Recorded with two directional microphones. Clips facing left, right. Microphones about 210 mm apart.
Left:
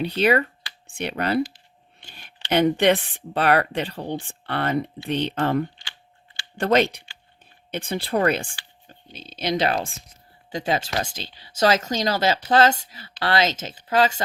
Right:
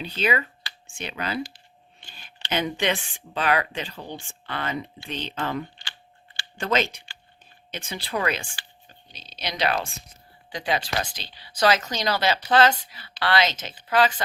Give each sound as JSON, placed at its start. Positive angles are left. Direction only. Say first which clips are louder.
{"t": 0.0, "sound": "speech", "louder": "left 6 dB", "side_deg": 60}